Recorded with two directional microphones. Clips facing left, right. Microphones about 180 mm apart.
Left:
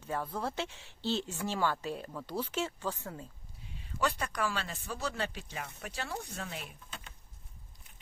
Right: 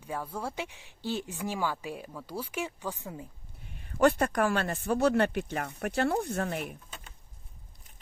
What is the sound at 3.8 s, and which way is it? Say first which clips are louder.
Speech: right 10 dB; 55° right (ahead or behind).